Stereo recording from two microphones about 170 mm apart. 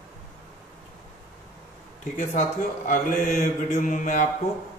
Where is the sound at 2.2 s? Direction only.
45° left (ahead or behind).